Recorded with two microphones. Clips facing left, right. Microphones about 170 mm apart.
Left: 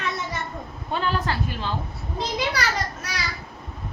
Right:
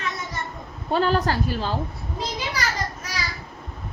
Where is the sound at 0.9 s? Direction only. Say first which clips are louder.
Right 5 dB; 40° right (ahead or behind).